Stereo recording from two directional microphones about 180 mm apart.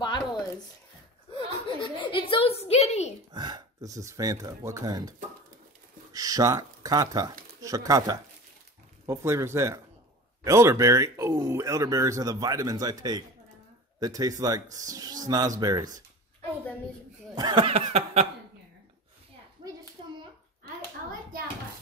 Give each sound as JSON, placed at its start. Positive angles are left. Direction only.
{"t": 0.0, "sound": "a sound", "side_deg": 25}
{"t": 3.3, "sound": "speech", "side_deg": -25}
{"t": 6.1, "sound": "speech", "side_deg": -20}
{"t": 17.4, "sound": "chuckle", "side_deg": -25}